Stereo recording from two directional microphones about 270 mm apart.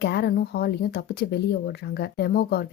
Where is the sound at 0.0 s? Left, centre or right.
Left.